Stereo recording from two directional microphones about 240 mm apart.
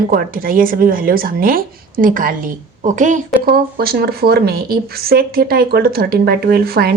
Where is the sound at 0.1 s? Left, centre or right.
Right.